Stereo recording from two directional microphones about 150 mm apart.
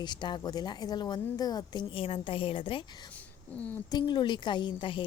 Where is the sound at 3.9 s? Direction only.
30° left (ahead or behind).